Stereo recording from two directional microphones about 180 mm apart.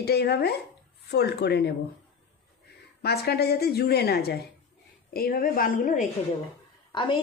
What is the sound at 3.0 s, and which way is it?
A woman's voice, 60° left (ahead or behind).